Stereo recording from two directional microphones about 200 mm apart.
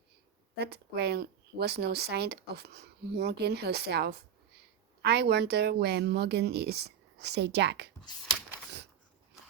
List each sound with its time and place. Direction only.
0.5 s speech: 55° right (ahead or behind)